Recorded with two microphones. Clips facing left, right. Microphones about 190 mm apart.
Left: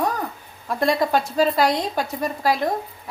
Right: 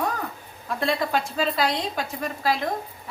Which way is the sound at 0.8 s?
40° left (ahead or behind).